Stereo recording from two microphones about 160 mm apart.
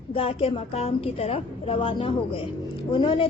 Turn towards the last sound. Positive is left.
turn(degrees=30)  # may be behind; listen again after turning